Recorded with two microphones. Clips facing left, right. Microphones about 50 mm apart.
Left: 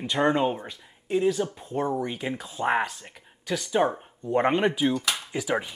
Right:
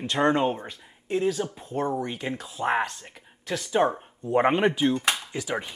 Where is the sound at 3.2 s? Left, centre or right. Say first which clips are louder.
Left 1 dB; centre.